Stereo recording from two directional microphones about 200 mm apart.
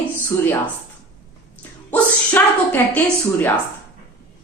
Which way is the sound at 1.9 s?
10° left (ahead or behind).